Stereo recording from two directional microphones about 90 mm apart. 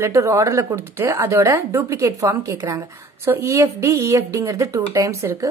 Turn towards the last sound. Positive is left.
turn(degrees=-35)  # may be behind; listen again after turning